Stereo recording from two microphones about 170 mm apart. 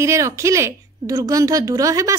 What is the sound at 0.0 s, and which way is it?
A woman's voice, 15° right (ahead or behind).